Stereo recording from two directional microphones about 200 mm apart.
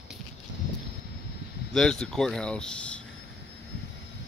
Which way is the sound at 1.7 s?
5° left (ahead or behind).